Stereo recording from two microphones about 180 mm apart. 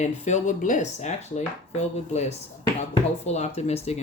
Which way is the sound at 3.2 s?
40° left (ahead or behind).